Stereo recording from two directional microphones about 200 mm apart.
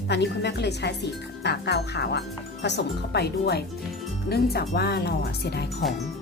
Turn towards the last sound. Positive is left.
turn(degrees=55)  # may be behind; listen again after turning